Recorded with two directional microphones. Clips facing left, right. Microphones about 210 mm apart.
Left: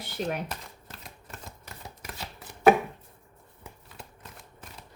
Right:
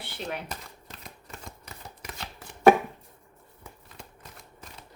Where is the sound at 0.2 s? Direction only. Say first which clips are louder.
Left 5 dB; 40° left (ahead or behind).